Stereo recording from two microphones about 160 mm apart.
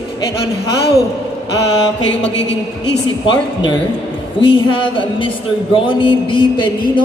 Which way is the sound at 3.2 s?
30° left (ahead or behind).